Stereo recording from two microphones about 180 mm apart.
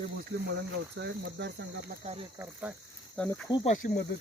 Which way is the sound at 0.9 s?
75° right (ahead or behind).